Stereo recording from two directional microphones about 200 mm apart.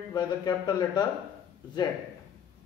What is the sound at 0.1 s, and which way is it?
Speech, 20° left (ahead or behind).